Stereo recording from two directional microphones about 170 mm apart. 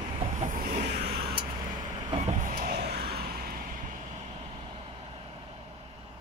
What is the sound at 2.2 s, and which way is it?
Vehicle, 45° right (ahead or behind).